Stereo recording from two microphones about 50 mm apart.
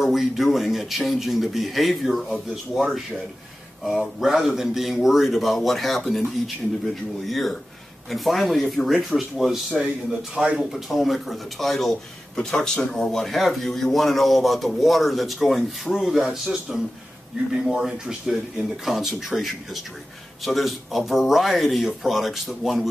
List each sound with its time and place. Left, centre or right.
0.0 s a man's voice: centre
4.2 s a man's voice: centre
10.3 s speech: centre
10.6 s a man's voice: centre